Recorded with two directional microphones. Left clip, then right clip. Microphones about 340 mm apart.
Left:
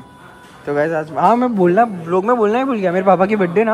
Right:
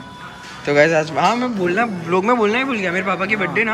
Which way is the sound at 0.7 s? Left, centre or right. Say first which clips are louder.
Right 4 dB; centre.